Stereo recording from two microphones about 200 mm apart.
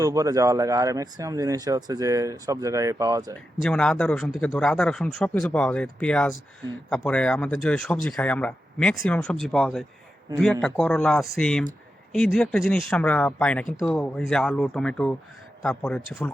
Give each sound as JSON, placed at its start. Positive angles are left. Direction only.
{"t": 0.0, "sound": "speech", "side_deg": -15}
{"t": 3.6, "sound": "speech", "side_deg": 5}